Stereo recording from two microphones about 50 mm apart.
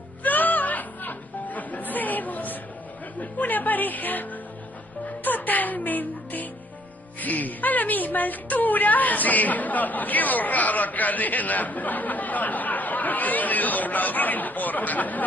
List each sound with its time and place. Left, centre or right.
0.2 s music: left
7.2 s speech: left